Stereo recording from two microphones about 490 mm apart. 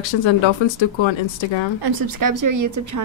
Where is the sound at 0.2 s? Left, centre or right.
Left.